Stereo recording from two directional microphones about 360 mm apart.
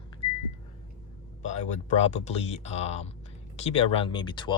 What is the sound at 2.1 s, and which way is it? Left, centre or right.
Speech, centre.